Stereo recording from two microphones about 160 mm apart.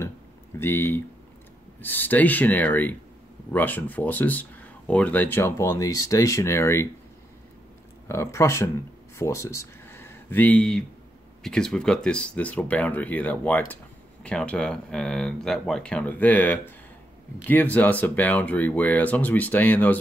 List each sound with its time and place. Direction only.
0.6 s speech: 15° left (ahead or behind)
8.1 s speech: 20° left (ahead or behind)